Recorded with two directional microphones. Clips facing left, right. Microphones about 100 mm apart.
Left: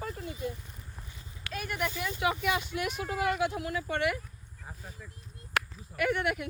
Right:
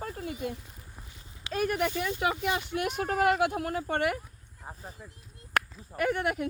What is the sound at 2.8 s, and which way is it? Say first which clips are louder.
Speech: right 4 dB; 55° right (ahead or behind).